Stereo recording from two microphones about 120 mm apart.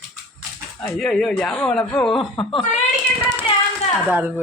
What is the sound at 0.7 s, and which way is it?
Speech, 5° left (ahead or behind).